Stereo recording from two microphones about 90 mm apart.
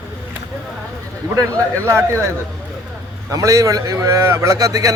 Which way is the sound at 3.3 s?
40° right (ahead or behind).